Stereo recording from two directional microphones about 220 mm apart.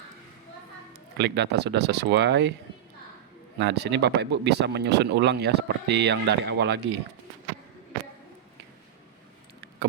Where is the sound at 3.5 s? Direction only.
50° right (ahead or behind).